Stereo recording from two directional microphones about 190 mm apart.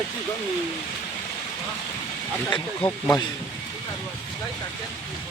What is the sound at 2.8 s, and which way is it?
Speech, 30° left (ahead or behind).